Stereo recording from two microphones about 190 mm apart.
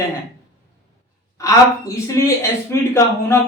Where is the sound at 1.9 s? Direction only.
15° left (ahead or behind).